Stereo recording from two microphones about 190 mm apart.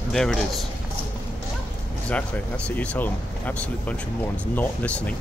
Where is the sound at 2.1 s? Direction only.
5° left (ahead or behind).